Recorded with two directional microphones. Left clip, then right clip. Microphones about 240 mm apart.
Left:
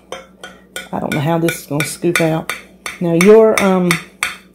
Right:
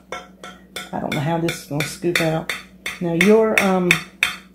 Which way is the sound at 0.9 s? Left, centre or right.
Left.